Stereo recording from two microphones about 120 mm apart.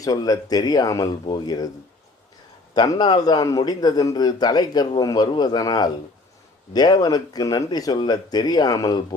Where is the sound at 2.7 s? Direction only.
35° left (ahead or behind).